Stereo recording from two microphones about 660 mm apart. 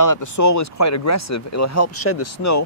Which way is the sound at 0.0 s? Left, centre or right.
Left.